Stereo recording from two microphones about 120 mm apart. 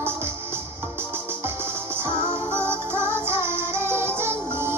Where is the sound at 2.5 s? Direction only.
20° right (ahead or behind).